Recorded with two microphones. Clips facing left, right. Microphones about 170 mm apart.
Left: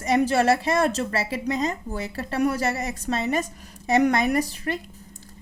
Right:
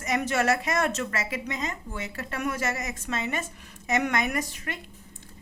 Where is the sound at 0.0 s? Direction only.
30° left (ahead or behind).